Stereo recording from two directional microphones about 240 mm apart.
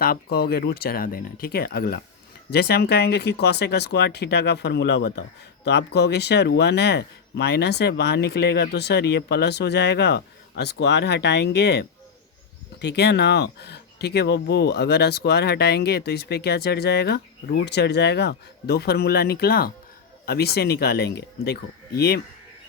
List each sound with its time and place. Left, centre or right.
0.0 s speech: left